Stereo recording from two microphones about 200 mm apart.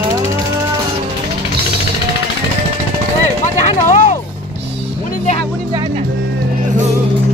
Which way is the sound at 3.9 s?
35° left (ahead or behind).